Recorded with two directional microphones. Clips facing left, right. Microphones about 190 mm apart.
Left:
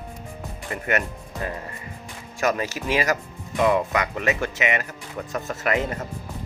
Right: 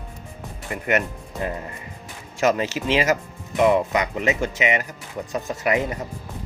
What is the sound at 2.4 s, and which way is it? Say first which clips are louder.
Speech: right 3 dB; 20° right (ahead or behind).